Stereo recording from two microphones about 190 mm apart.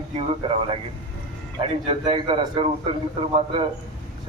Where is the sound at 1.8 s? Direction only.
30° right (ahead or behind).